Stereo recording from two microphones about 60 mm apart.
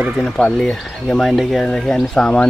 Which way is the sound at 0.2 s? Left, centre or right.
Centre.